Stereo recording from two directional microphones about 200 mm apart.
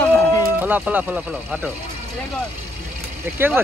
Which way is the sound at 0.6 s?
10° right (ahead or behind).